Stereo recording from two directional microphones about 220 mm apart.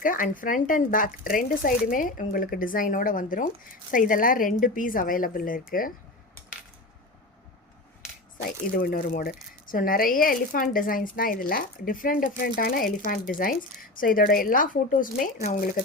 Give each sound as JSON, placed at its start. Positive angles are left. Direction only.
{"t": 0.0, "sound": "speech", "side_deg": 40}
{"t": 8.4, "sound": "speech", "side_deg": 40}